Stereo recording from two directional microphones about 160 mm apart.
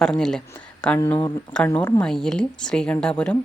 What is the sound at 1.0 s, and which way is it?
Speech, 15° left (ahead or behind).